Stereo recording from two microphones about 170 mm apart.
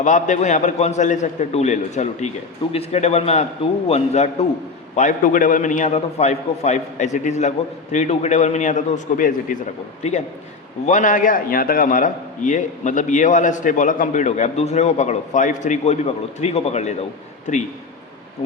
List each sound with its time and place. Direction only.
0.0 s a man's voice: 45° left (ahead or behind)
4.9 s a man's voice: 50° left (ahead or behind)
10.0 s a man's voice: 40° left (ahead or behind)